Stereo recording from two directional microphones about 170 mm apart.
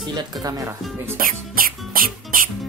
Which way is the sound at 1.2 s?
55° right (ahead or behind).